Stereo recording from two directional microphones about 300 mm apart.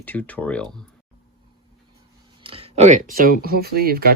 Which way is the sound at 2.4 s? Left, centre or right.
Centre.